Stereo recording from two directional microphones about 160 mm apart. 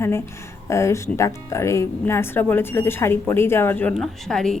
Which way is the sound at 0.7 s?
15° left (ahead or behind).